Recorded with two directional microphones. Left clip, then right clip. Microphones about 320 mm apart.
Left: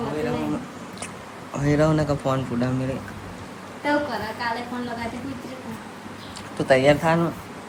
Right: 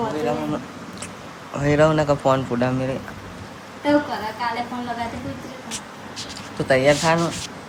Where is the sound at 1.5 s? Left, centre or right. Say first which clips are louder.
Right 4 dB; centre.